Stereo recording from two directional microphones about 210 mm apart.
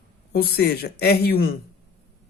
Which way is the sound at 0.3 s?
50° left (ahead or behind).